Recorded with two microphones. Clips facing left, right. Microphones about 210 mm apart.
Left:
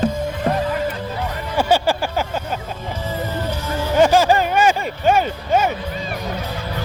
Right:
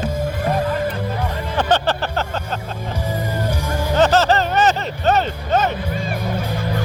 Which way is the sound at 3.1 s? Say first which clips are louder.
Even; 10° right (ahead or behind).